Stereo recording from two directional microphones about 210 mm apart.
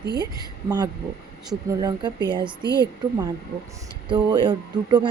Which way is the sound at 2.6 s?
55° right (ahead or behind).